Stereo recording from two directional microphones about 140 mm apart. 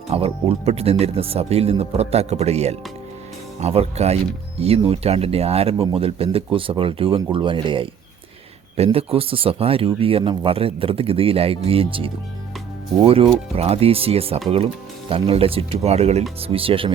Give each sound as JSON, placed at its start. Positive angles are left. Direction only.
{"t": 0.1, "sound": "speech", "side_deg": -45}